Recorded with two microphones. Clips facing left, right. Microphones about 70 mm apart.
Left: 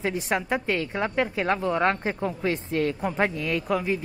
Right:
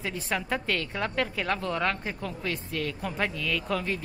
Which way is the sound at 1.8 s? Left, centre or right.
Left.